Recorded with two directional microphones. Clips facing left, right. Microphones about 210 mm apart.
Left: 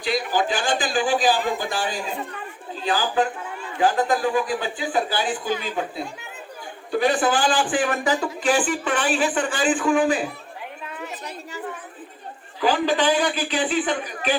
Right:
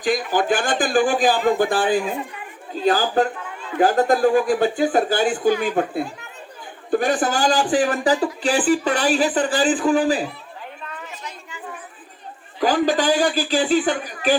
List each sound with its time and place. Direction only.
0.0 s speech: 45° right (ahead or behind)
12.5 s speech: 40° right (ahead or behind)